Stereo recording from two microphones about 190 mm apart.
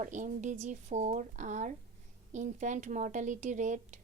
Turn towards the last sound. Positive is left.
turn(degrees=-40)  # may be behind; listen again after turning